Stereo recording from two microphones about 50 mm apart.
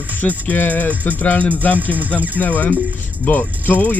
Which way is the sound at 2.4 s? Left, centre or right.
Left.